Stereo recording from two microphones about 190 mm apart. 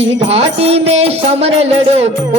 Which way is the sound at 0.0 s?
30° right (ahead or behind).